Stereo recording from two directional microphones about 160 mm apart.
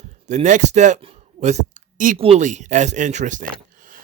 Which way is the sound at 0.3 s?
50° right (ahead or behind).